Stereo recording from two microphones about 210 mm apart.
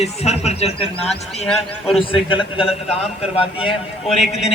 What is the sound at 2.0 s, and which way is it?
Speech, 25° left (ahead or behind).